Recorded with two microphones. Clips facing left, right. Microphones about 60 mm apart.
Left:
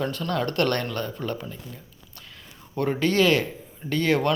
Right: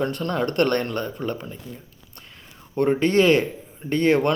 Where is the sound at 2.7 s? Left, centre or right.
Right.